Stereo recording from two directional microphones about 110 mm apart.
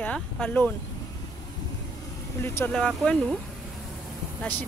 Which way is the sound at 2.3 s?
25° left (ahead or behind).